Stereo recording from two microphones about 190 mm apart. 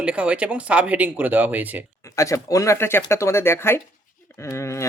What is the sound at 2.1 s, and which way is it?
Speech, 15° left (ahead or behind).